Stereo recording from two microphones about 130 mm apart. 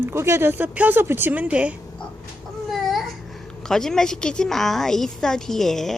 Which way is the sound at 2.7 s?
Centre (ahead or behind).